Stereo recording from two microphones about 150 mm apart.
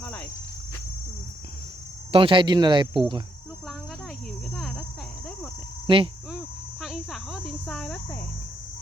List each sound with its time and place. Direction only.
2.1 s speech: 35° right (ahead or behind)
4.5 s cricket: centre (ahead or behind)
5.9 s speech: 35° right (ahead or behind)
6.8 s insect: 5° right (ahead or behind)